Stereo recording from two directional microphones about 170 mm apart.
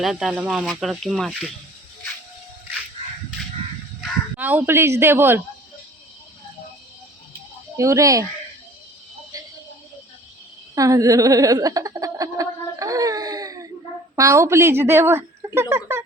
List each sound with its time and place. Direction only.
0.0 s speech: centre (ahead or behind)
4.4 s a woman's voice: 10° right (ahead or behind)
7.8 s speech: 20° right (ahead or behind)
10.8 s a sound: 20° right (ahead or behind)
14.2 s a woman's voice: 20° right (ahead or behind)